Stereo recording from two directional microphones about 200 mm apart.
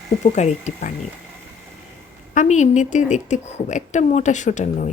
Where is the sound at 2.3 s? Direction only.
35° left (ahead or behind).